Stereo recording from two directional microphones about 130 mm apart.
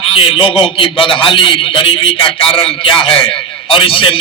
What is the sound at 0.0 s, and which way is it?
A man's voice, 45° left (ahead or behind).